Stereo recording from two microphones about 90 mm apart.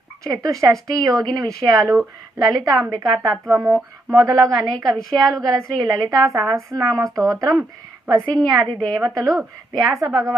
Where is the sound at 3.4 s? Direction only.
40° right (ahead or behind).